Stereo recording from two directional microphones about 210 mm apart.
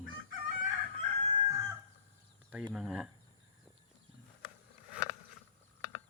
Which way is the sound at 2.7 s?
5° right (ahead or behind).